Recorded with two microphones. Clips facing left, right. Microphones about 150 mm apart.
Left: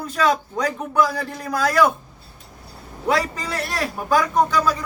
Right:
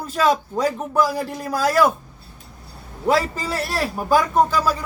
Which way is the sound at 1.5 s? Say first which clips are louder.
Even; 5° right (ahead or behind).